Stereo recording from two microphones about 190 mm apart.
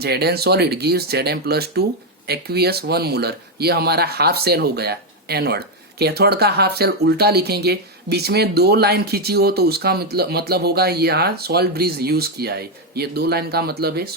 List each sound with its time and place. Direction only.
0.0 s speech: 55° right (ahead or behind)